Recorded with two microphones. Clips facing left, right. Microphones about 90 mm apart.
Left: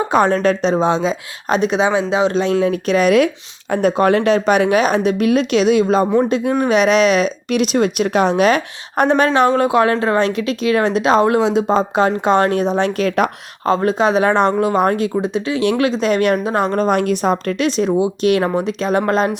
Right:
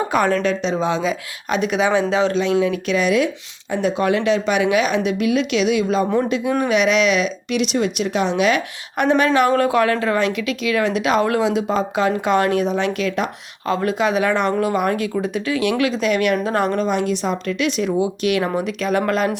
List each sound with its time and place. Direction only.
0.1 s speech: 30° left (ahead or behind)
2.3 s speech: 35° left (ahead or behind)
3.7 s speech: 50° left (ahead or behind)
16.4 s speech: 20° left (ahead or behind)
16.7 s speech: 50° left (ahead or behind)
18.2 s speech: 35° left (ahead or behind)